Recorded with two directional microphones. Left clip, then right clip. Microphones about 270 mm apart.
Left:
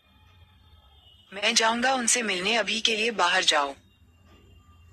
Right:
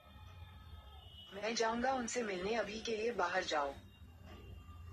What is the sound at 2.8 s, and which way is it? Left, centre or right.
Speech, left.